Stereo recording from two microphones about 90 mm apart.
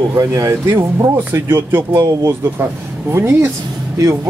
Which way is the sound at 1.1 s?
25° right (ahead or behind).